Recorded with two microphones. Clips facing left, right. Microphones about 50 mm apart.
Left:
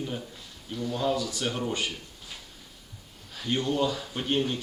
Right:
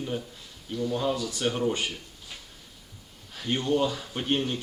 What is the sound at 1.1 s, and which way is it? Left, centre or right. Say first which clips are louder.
Speech: right 1 dB; right.